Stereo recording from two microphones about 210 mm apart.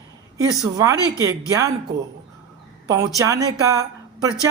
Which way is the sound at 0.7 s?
15° right (ahead or behind).